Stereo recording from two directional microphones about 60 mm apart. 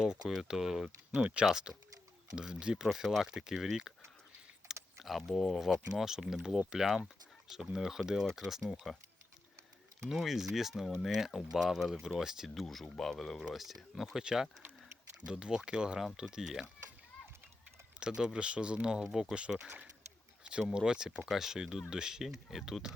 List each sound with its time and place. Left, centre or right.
0.3 s speech: centre
1.2 s speech: centre
10.1 s speech: centre
12.6 s speech: centre
18.0 s speech: centre